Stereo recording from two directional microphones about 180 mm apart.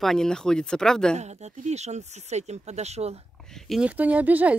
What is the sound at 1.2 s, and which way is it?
Speech, 40° right (ahead or behind).